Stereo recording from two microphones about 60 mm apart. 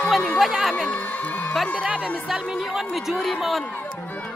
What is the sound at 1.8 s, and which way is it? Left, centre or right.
A man's voice, centre.